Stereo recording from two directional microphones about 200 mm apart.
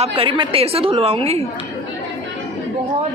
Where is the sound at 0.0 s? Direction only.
30° right (ahead or behind).